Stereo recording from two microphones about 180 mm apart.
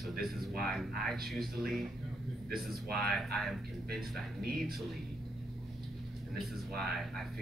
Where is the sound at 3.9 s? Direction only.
55° right (ahead or behind).